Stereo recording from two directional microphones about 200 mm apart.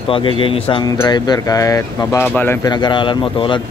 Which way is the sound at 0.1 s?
25° left (ahead or behind).